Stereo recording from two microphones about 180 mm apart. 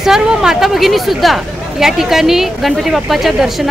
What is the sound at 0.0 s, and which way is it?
A woman's voice, 5° right (ahead or behind).